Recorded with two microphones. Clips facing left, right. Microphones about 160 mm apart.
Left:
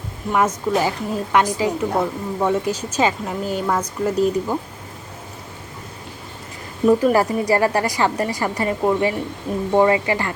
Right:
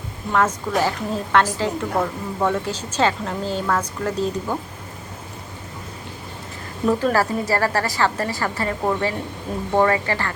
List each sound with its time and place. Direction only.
0.3 s a woman's voice: 10° left (ahead or behind)
6.8 s a woman's voice: 15° left (ahead or behind)